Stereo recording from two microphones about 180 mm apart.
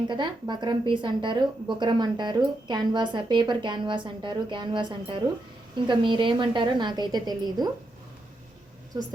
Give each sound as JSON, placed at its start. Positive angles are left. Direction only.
{"t": 0.1, "sound": "a woman's voice", "side_deg": -25}